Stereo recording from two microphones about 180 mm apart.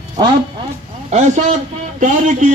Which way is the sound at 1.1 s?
40° right (ahead or behind).